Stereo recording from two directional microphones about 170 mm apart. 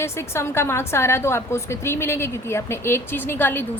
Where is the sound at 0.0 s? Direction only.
15° left (ahead or behind).